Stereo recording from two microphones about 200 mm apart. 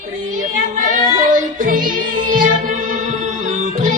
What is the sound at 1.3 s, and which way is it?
Music, 40° right (ahead or behind).